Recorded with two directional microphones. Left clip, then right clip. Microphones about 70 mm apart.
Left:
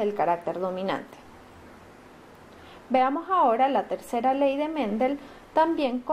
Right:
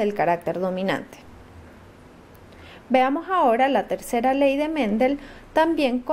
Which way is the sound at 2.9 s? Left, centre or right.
Right.